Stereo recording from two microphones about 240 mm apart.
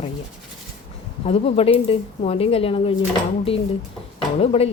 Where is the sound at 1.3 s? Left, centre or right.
Left.